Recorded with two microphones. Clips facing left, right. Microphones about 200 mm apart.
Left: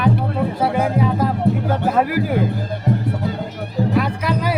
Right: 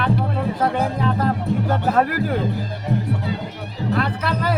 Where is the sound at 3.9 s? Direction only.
10° left (ahead or behind).